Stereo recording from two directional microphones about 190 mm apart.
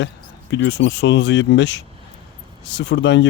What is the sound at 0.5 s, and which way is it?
Speech, 70° left (ahead or behind).